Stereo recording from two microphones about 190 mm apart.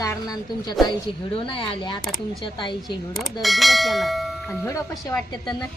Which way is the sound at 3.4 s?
Centre (ahead or behind).